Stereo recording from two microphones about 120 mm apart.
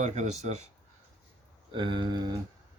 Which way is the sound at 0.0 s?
75° right (ahead or behind).